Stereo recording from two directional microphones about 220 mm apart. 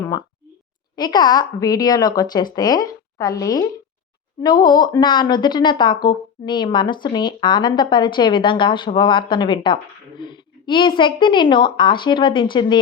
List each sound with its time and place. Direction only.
0.9 s a woman's voice: 20° left (ahead or behind)